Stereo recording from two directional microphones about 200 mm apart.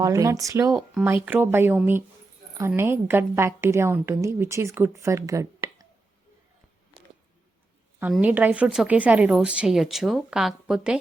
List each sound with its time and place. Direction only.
0.0 s a woman's voice: 15° right (ahead or behind)
7.9 s a woman's voice: 10° right (ahead or behind)